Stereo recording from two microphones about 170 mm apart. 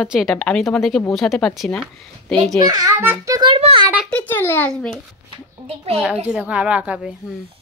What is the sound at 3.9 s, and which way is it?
Speech, 5° left (ahead or behind).